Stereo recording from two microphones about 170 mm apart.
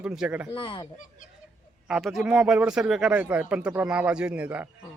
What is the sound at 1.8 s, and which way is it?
Speech, centre (ahead or behind).